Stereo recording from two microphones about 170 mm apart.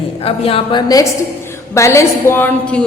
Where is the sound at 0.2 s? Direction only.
35° left (ahead or behind).